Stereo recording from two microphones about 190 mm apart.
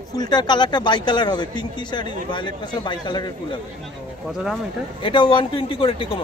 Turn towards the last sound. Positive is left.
turn(degrees=30)  # may be behind; listen again after turning